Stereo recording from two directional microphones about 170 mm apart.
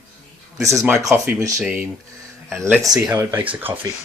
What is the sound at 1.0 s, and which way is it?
Speech, 5° right (ahead or behind).